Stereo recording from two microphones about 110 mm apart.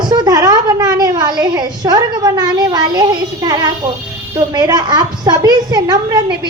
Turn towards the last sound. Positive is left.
turn(degrees=-35)  # may be behind; listen again after turning